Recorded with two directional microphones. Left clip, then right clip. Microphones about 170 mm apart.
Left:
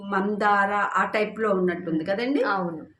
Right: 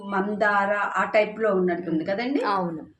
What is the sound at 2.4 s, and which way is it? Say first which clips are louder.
Speech: right 1 dB; 15° right (ahead or behind).